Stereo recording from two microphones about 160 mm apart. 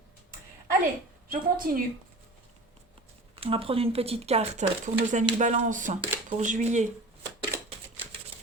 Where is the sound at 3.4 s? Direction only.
35° right (ahead or behind).